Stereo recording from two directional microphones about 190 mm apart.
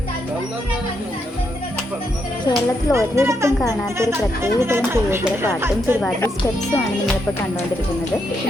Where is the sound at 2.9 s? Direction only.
15° right (ahead or behind).